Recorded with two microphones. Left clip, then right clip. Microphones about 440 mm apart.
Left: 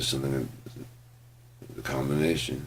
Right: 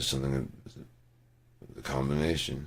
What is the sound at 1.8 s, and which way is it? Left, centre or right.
Speech, right.